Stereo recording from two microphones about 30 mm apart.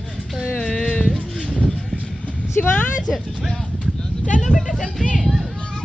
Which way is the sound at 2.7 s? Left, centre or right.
Left.